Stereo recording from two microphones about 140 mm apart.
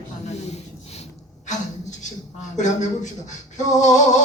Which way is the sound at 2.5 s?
60° left (ahead or behind).